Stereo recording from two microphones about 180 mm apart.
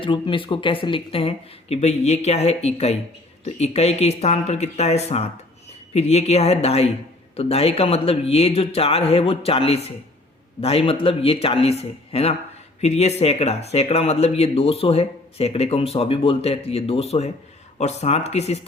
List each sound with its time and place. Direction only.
0.0 s speech: 30° left (ahead or behind)